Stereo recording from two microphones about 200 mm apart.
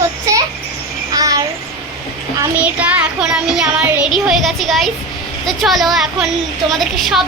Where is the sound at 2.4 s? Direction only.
5° right (ahead or behind).